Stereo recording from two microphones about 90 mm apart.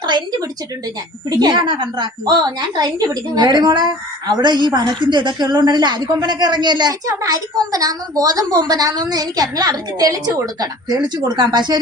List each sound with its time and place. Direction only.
0.0 s a sound: 55° right (ahead or behind)
1.4 s a woman's voice: 50° right (ahead or behind)
7.1 s a woman's voice: 40° right (ahead or behind)